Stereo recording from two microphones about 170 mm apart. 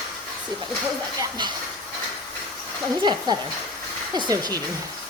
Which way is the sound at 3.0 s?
25° right (ahead or behind).